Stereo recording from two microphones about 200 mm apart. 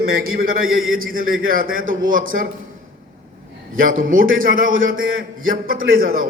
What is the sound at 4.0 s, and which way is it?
Speech, 45° right (ahead or behind).